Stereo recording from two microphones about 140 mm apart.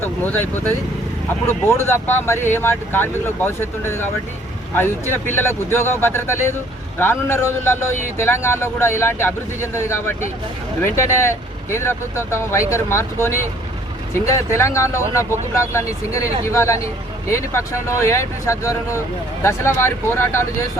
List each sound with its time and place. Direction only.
0.0 s speech: 15° left (ahead or behind)
1.6 s speech: 20° left (ahead or behind)